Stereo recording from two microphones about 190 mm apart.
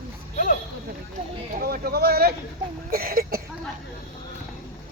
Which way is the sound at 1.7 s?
55° right (ahead or behind).